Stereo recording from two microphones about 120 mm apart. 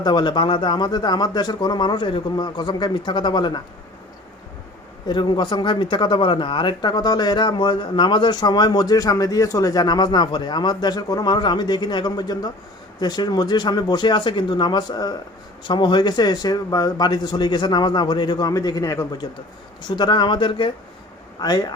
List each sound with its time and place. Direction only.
0.0 s speech: 35° left (ahead or behind)
5.0 s speech: 40° left (ahead or behind)
19.9 s speech: 40° left (ahead or behind)
21.4 s speech: 35° left (ahead or behind)